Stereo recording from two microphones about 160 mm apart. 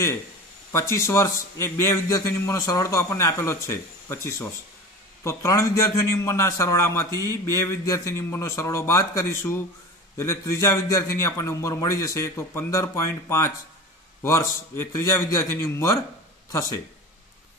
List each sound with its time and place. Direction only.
0.7 s a man's voice: 15° left (ahead or behind)